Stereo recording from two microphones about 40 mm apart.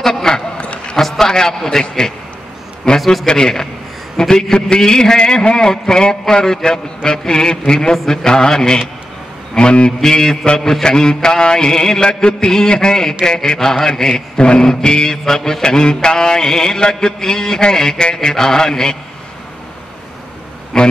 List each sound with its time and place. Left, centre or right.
0.0 s a sound: centre
0.6 s a sound: left
0.9 s a sound: centre
1.2 s mantra: centre
3.0 s a man's voice: centre
3.3 s mantra: centre
9.6 s a man's voice: left
9.9 s mantra: centre
10.9 s a man's voice: centre
11.2 s mantra: centre
12.1 s a man's voice: left
13.2 s mantra: centre
20.7 s mantra: centre